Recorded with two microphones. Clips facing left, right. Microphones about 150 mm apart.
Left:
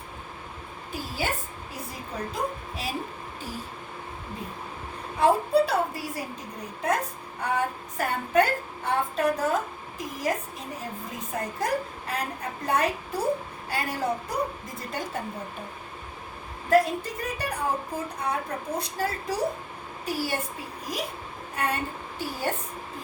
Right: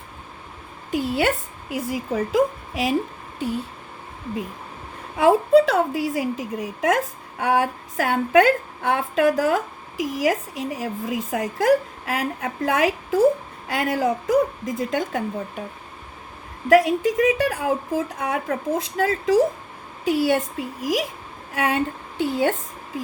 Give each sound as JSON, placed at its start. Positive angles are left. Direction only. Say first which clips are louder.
{"t": 0.9, "sound": "a woman's voice", "louder": "right 10 dB", "side_deg": -70}
{"t": 1.7, "sound": "speech", "louder": "right 13 dB", "side_deg": -90}
{"t": 5.1, "sound": "a woman's voice", "louder": "right 6 dB", "side_deg": -90}
{"t": 16.6, "sound": "a woman's voice", "louder": "right 6 dB", "side_deg": -80}
{"t": 20.1, "sound": "a woman's voice", "louder": "right 10 dB", "side_deg": -70}
{"t": 22.2, "sound": "speech", "louder": "right 9 dB", "side_deg": -80}